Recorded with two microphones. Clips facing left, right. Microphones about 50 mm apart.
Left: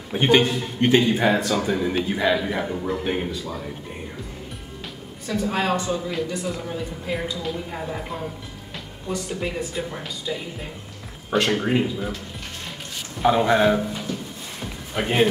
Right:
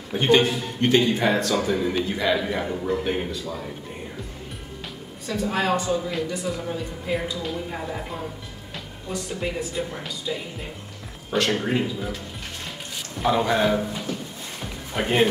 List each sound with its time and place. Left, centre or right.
0.1 s a man's voice: centre
5.5 s a man's voice: centre
11.2 s speech: left
11.5 s a man's voice: centre
13.2 s a man's voice: centre